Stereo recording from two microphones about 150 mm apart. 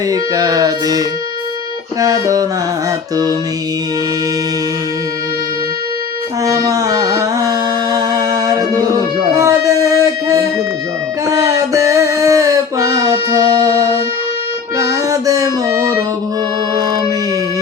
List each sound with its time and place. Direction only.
0.1 s music: 25° right (ahead or behind)
2.2 s music: 25° right (ahead or behind)
6.4 s carnatic music: 25° right (ahead or behind)
7.9 s music: 25° right (ahead or behind)
11.3 s a sound: 25° right (ahead or behind)
14.8 s music: 25° right (ahead or behind)